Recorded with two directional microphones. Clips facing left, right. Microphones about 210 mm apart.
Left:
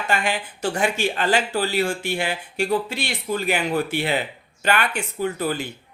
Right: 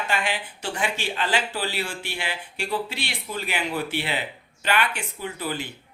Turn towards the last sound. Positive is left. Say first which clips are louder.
# left 6 dB
turn(degrees=45)  # may be behind; listen again after turning